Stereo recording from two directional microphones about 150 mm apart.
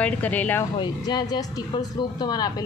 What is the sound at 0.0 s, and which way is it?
Speech, 10° left (ahead or behind).